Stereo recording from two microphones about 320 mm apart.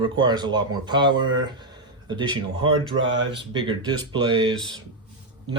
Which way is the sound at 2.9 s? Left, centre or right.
Right.